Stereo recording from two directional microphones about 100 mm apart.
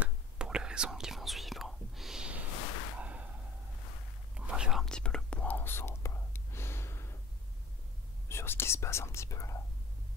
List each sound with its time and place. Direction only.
0.0 s whispering: 10° right (ahead or behind)
3.0 s a sound: 15° right (ahead or behind)
4.5 s whispering: 5° right (ahead or behind)
4.8 s whispering: 5° left (ahead or behind); by 7.2 s 25° left (ahead or behind)
8.3 s whispering: 25° left (ahead or behind)